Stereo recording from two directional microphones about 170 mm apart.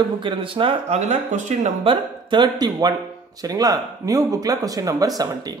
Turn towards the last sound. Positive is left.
turn(degrees=-20)  # may be behind; listen again after turning